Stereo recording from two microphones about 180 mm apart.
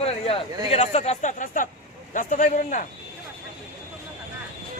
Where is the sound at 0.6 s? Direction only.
35° left (ahead or behind).